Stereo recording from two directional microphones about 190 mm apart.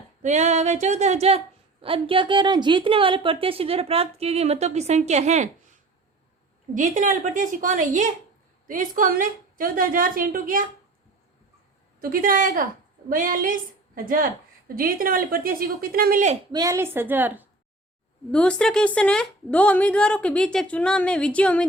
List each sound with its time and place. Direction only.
0.2 s a woman's voice: 40° right (ahead or behind)
6.7 s a woman's voice: 40° right (ahead or behind)
11.9 s a woman's voice: 50° right (ahead or behind)
16.5 s a woman's voice: 20° right (ahead or behind)
18.3 s a woman's voice: 5° left (ahead or behind)